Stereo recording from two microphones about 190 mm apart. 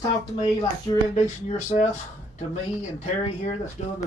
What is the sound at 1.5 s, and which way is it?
Speech, 40° left (ahead or behind).